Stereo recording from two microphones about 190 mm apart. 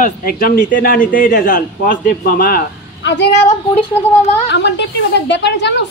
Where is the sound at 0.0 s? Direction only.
50° left (ahead or behind).